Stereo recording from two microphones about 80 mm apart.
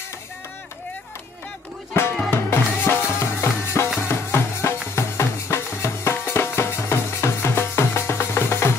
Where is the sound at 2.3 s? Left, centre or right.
Left.